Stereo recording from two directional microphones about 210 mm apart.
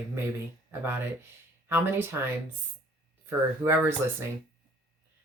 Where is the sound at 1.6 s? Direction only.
10° right (ahead or behind).